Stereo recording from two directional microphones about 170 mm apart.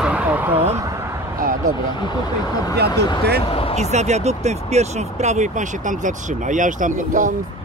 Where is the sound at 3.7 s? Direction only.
40° right (ahead or behind).